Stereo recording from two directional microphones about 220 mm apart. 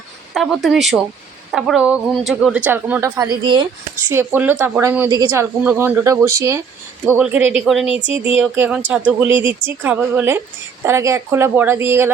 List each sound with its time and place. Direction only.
0.3 s a woman's voice: centre (ahead or behind); by 3.7 s 20° right (ahead or behind)
4.1 s a woman's voice: 10° right (ahead or behind)